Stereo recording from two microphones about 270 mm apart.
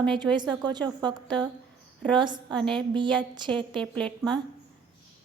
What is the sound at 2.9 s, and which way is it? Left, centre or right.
Speech, centre.